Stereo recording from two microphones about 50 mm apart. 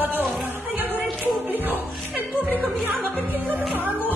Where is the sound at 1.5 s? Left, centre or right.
Right.